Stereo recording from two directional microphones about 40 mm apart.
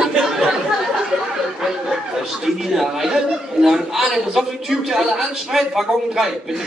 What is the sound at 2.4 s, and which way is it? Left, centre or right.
A man's voice, centre.